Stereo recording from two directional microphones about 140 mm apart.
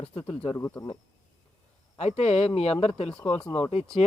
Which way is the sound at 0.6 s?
20° left (ahead or behind).